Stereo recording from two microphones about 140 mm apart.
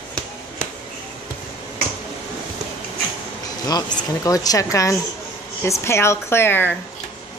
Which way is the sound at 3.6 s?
30° left (ahead or behind).